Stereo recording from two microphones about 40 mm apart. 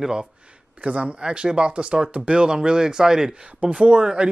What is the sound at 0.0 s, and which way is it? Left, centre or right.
Speech, right.